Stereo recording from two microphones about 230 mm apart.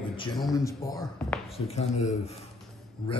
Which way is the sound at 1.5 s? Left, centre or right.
Left.